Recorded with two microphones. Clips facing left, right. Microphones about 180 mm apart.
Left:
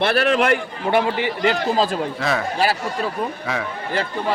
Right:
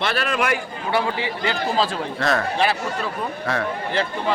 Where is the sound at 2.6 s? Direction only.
35° left (ahead or behind).